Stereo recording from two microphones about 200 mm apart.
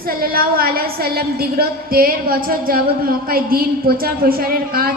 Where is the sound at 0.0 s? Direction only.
50° right (ahead or behind).